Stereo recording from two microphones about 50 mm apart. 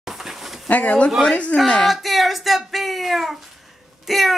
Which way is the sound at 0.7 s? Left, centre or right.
Left.